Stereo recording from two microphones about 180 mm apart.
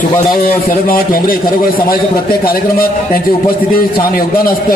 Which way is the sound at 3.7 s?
55° left (ahead or behind).